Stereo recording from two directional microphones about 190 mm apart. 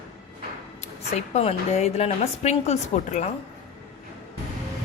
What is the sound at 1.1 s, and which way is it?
A woman's voice, 35° left (ahead or behind).